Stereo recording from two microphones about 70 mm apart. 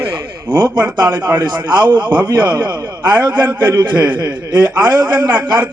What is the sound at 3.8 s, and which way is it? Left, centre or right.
A man's voice, right.